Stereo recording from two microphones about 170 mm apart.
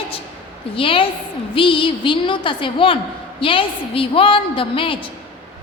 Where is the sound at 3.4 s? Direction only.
30° left (ahead or behind).